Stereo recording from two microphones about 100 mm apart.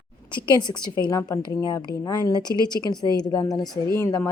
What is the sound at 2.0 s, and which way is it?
A woman's voice, 40° left (ahead or behind).